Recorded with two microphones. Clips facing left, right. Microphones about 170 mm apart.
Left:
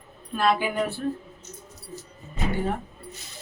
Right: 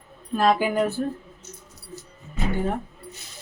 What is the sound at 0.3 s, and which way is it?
Speech, 40° right (ahead or behind).